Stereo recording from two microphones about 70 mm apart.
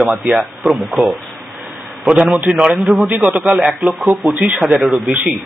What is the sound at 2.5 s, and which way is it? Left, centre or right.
Speech, centre.